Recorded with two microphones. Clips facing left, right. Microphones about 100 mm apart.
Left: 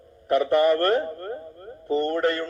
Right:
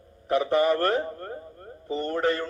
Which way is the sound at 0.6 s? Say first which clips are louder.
Left 3 dB; 15° right (ahead or behind).